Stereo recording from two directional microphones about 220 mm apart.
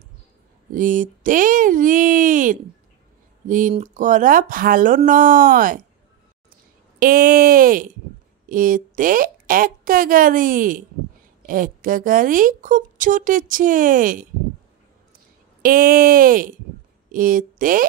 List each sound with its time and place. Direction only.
0.7 s a woman's voice: 35° right (ahead or behind)
7.0 s a woman's voice: 40° right (ahead or behind)
15.6 s a woman's voice: 40° right (ahead or behind)